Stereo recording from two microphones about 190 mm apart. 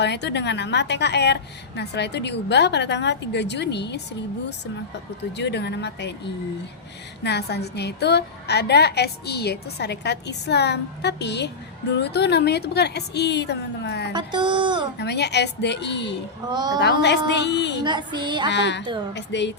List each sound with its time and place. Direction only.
0.0 s a woman's voice: 65° left (ahead or behind)
5.4 s a woman's voice: 65° left (ahead or behind)
7.3 s a woman's voice: 60° left (ahead or behind)
14.1 s a sound: 25° right (ahead or behind)
14.9 s a woman's voice: 60° left (ahead or behind)
16.5 s a woman's voice: 20° right (ahead or behind)
16.8 s a woman's voice: 65° left (ahead or behind)
17.8 s a woman's voice: 25° right (ahead or behind)
18.4 s a woman's voice: 65° left (ahead or behind)